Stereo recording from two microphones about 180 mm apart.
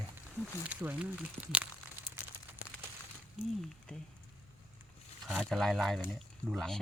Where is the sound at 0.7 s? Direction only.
10° right (ahead or behind).